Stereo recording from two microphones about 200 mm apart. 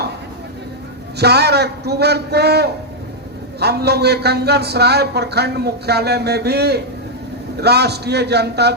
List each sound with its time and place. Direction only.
1.2 s speech: 55° right (ahead or behind)